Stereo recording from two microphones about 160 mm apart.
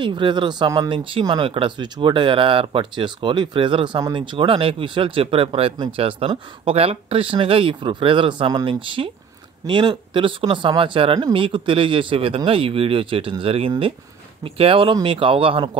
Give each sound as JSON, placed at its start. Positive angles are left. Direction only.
{"t": 0.0, "sound": "speech", "side_deg": -30}